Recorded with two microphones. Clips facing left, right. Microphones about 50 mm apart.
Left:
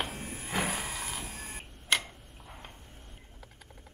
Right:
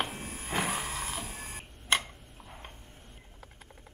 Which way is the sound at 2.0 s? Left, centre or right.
Centre.